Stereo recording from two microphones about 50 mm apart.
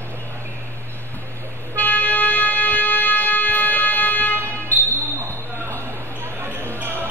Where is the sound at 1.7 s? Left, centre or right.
Left.